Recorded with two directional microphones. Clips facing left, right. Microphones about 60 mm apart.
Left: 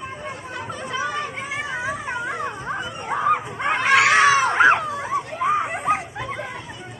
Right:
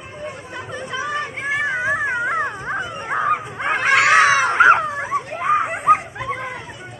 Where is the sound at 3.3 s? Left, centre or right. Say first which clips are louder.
Even; centre.